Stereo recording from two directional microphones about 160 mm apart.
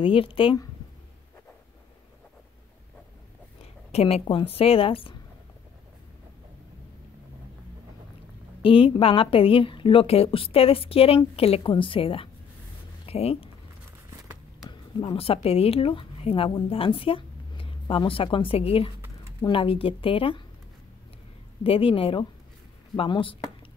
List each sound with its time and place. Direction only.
0.0 s a woman's voice: 35° left (ahead or behind)
3.9 s a woman's voice: 35° left (ahead or behind)
8.6 s a woman's voice: 35° left (ahead or behind)
14.7 s a woman's voice: 30° left (ahead or behind)
21.6 s a woman's voice: 35° left (ahead or behind)